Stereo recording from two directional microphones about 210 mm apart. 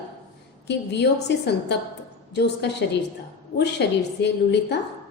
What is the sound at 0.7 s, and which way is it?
A woman's voice, 55° left (ahead or behind).